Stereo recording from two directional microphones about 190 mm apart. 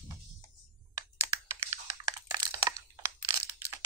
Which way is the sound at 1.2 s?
15° right (ahead or behind).